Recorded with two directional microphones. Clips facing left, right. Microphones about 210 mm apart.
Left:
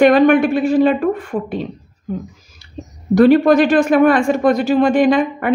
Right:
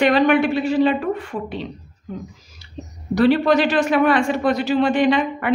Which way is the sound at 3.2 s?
50° left (ahead or behind).